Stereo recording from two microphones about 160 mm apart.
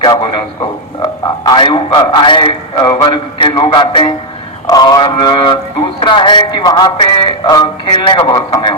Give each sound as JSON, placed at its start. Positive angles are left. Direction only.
{"t": 0.0, "sound": "a man's voice", "side_deg": 30}